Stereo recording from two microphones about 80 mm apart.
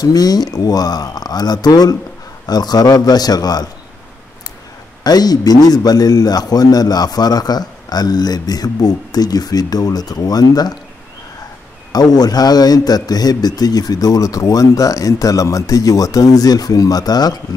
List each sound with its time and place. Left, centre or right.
0.0 s a man's voice: left
5.0 s a man's voice: left
11.9 s a man's voice: left